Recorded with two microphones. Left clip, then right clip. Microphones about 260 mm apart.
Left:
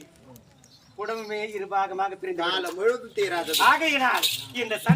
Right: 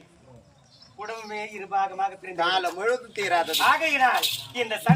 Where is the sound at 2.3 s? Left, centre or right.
Centre.